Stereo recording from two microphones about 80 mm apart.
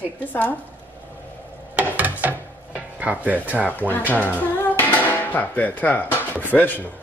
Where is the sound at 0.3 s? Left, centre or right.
Left.